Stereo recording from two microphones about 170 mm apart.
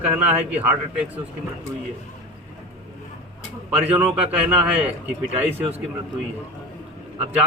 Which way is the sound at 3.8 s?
35° right (ahead or behind).